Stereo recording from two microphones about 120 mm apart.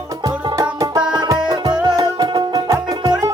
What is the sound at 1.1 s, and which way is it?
Music, 35° right (ahead or behind).